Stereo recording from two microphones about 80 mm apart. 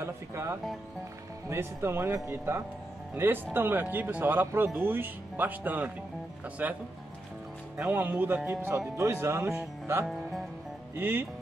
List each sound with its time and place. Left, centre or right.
0.0 s music: right
1.5 s speech: right
7.9 s speech: right
8.5 s speech: right